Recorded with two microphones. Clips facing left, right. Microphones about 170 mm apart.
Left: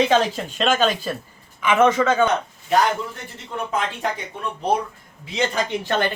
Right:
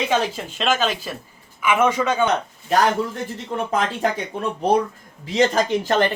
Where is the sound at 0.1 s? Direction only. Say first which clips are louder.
Left 2 dB; 5° right (ahead or behind).